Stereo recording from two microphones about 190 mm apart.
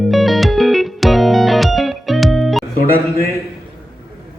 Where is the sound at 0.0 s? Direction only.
Centre (ahead or behind).